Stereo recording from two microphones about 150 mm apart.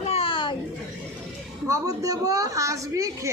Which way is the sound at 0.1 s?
40° left (ahead or behind).